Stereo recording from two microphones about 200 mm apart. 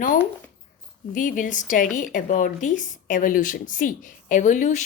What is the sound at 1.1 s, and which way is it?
Speech, 40° left (ahead or behind).